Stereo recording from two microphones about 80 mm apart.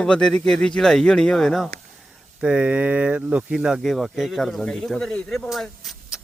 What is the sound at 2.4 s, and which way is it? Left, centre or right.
Speech, centre.